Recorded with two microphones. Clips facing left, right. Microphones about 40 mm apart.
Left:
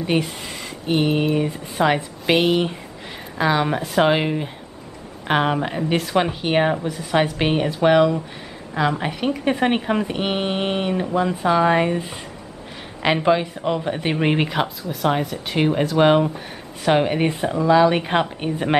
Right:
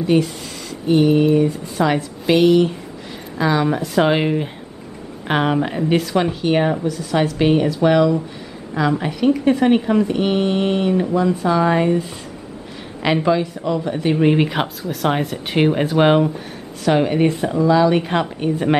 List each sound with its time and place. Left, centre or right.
0.0 s speech: left
3.9 s a woman's voice: centre
14.5 s speech: centre
16.8 s a woman's voice: centre